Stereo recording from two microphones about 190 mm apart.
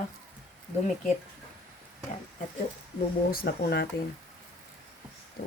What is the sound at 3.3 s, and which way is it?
Speech, 55° left (ahead or behind).